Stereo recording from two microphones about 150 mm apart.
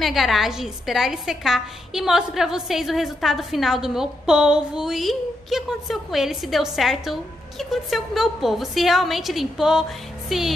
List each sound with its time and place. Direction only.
0.0 s a woman's voice: centre (ahead or behind)